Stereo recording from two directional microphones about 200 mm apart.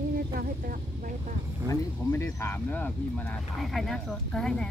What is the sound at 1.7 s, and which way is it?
Speech, 15° left (ahead or behind).